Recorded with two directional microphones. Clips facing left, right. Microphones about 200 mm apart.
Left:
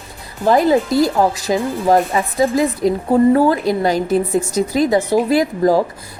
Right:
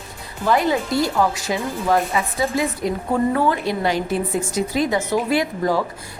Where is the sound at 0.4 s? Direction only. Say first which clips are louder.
Left 6 dB; 40° left (ahead or behind).